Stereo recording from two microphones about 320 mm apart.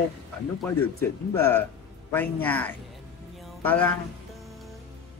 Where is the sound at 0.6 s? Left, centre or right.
Centre.